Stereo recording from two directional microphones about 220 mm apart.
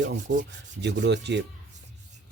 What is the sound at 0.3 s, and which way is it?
Rub, 35° right (ahead or behind).